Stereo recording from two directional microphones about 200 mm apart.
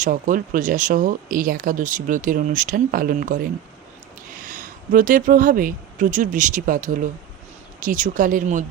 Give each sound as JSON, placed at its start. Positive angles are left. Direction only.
{"t": 0.0, "sound": "speech", "side_deg": -40}